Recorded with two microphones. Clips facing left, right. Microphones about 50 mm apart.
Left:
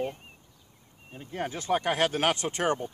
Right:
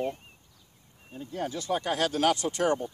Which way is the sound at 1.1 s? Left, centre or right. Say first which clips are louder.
Even; left.